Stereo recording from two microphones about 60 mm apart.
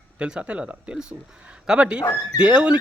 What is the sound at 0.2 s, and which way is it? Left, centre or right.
A man's voice, centre.